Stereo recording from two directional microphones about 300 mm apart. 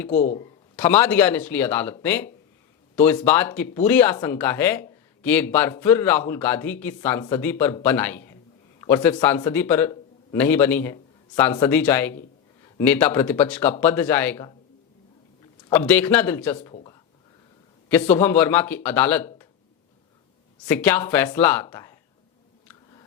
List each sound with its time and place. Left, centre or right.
0.1 s a man's voice: left
0.8 s a man's voice: centre
15.7 s speech: centre
16.6 s a sound: centre
18.1 s speech: centre
20.7 s speech: centre
22.7 s a sound: centre